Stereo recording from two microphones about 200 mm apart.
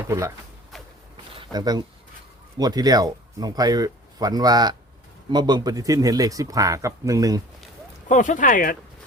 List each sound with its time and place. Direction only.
0.1 s speech: 15° right (ahead or behind)
1.1 s a sound: 25° right (ahead or behind)
2.6 s speech: 20° right (ahead or behind)
8.0 s speech: 40° left (ahead or behind)